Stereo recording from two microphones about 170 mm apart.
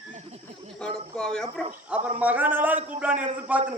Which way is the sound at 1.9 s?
10° right (ahead or behind).